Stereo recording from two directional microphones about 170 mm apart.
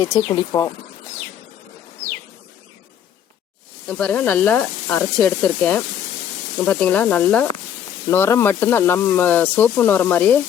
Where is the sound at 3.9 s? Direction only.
10° left (ahead or behind).